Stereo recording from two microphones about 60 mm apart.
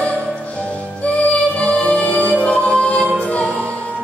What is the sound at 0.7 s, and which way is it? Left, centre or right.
Music, left.